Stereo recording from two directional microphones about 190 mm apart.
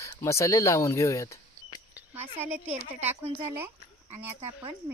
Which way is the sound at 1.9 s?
10° right (ahead or behind).